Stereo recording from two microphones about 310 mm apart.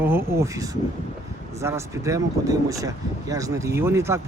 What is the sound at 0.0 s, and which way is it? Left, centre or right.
Speech, centre.